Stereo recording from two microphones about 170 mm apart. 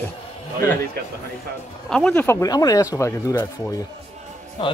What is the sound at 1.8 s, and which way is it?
Speech, 5° left (ahead or behind).